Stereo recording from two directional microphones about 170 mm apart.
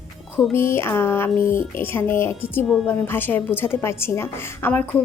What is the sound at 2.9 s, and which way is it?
A woman's voice, 10° left (ahead or behind).